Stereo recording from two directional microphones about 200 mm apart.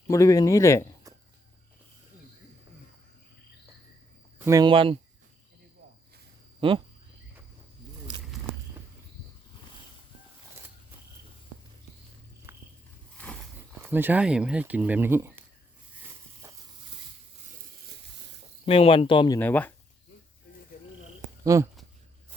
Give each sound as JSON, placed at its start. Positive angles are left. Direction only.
{"t": 0.1, "sound": "speech", "side_deg": 15}
{"t": 1.1, "sound": "a sound", "side_deg": -15}
{"t": 4.4, "sound": "speech", "side_deg": -20}
{"t": 6.6, "sound": "speech", "side_deg": -25}
{"t": 12.5, "sound": "walk", "side_deg": -10}
{"t": 13.1, "sound": "a sound", "side_deg": 5}
{"t": 13.8, "sound": "speech", "side_deg": -10}
{"t": 16.4, "sound": "a sound", "side_deg": -15}
{"t": 18.6, "sound": "speech", "side_deg": 30}
{"t": 19.4, "sound": "speech", "side_deg": 10}
{"t": 21.4, "sound": "speech", "side_deg": -15}